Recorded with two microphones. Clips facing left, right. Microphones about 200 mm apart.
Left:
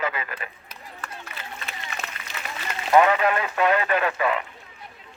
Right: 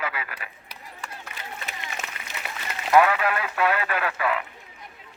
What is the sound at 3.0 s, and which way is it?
Radio, 5° right (ahead or behind).